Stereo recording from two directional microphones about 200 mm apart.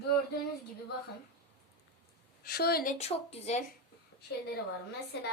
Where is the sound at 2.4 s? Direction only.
50° left (ahead or behind).